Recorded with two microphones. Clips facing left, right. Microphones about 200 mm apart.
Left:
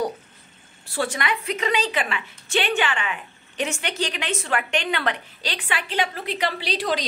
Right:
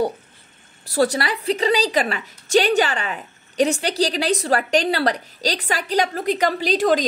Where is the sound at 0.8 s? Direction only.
40° right (ahead or behind).